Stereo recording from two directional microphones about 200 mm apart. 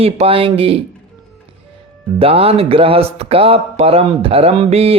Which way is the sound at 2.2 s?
30° right (ahead or behind).